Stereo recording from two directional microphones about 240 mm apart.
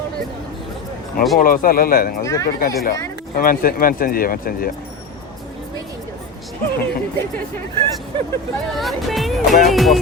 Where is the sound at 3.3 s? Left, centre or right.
Left.